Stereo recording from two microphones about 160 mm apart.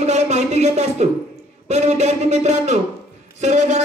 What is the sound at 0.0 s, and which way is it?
A man's voice, 45° right (ahead or behind).